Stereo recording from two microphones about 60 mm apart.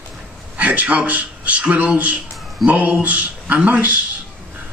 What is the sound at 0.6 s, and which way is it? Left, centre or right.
A man's voice, right.